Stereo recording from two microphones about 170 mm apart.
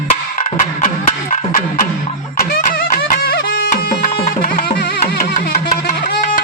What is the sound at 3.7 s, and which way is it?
Music, 50° left (ahead or behind).